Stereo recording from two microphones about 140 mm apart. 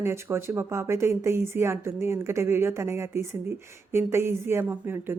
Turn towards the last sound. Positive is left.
turn(degrees=-15)  # may be behind; listen again after turning